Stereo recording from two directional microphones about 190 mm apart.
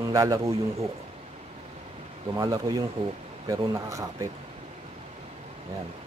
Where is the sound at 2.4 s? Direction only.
20° right (ahead or behind).